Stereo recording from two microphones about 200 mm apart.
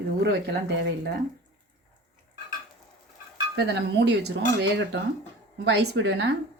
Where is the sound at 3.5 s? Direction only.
60° right (ahead or behind).